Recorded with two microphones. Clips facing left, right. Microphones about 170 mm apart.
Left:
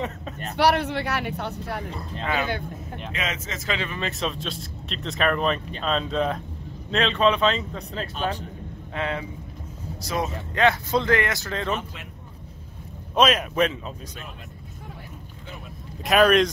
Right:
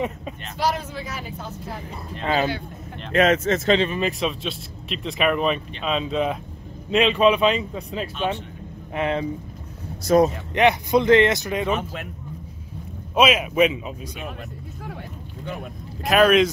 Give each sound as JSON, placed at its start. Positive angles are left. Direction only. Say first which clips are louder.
{"t": 0.6, "sound": "speech", "louder": "left 4 dB", "side_deg": 70}
{"t": 3.1, "sound": "speech", "louder": "right 14 dB", "side_deg": -50}
{"t": 3.6, "sound": "speech", "louder": "right 5 dB", "side_deg": -25}
{"t": 4.2, "sound": "speech", "louder": "right 3 dB", "side_deg": -5}
{"t": 8.9, "sound": "speech", "louder": "right 5 dB", "side_deg": -20}
{"t": 10.0, "sound": "speech", "louder": "right 11 dB", "side_deg": -40}
{"t": 10.5, "sound": "speech", "louder": "even", "side_deg": -15}
{"t": 13.1, "sound": "speech", "louder": "right 2 dB", "side_deg": -5}
{"t": 16.0, "sound": "speech", "louder": "right 2 dB", "side_deg": 0}